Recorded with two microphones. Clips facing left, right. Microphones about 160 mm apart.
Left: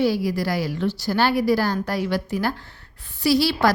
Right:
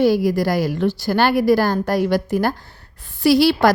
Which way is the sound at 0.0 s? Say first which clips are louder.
Right 5 dB; 50° right (ahead or behind).